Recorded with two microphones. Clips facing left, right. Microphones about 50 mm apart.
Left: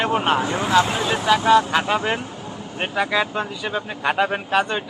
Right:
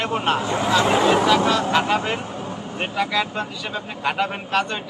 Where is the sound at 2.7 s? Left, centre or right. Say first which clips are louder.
Left 2 dB; centre.